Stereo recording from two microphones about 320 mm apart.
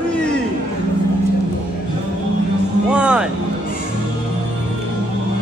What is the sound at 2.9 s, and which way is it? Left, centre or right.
Vehicle, centre.